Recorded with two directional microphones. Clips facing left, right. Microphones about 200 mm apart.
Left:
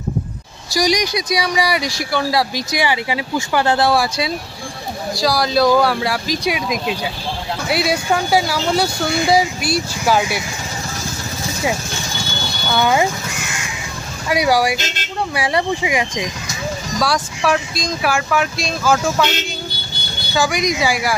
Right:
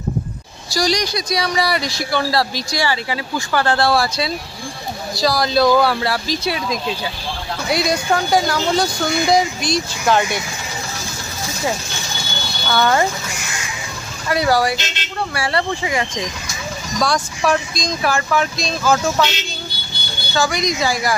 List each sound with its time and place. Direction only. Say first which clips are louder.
0.7 s speech: left 2 dB; 15° left (ahead or behind)
12.7 s speech: even; 10° left (ahead or behind)
14.3 s speech: left 1 dB; 10° left (ahead or behind)
20.3 s speech: left 1 dB; 10° left (ahead or behind)